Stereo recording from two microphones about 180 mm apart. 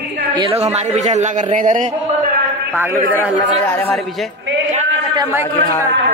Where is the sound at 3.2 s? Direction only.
10° left (ahead or behind).